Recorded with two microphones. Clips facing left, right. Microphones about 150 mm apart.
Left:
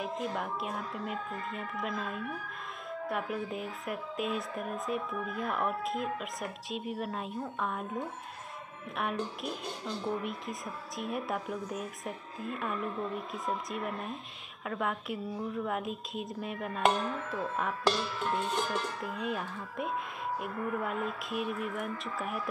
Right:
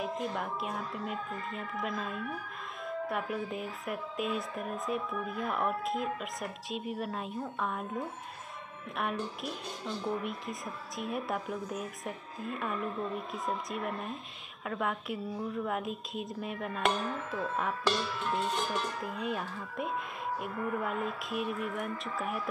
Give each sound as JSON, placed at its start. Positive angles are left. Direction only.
{"t": 0.0, "sound": "speech", "side_deg": 0}
{"t": 8.9, "sound": "speech", "side_deg": 0}